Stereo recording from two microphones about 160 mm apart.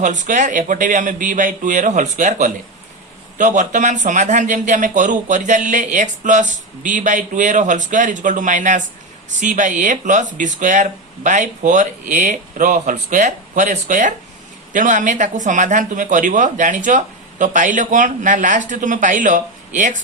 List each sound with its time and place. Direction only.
0.0 s a man's voice: 50° right (ahead or behind)